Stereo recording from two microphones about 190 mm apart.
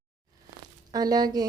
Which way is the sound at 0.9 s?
20° right (ahead or behind).